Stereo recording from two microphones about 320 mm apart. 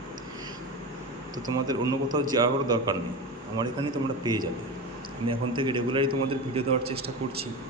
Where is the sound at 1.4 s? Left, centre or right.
Centre.